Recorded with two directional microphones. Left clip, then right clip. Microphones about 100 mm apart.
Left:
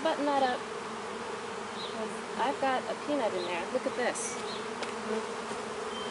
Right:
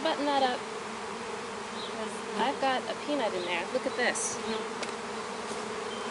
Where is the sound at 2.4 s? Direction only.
15° right (ahead or behind).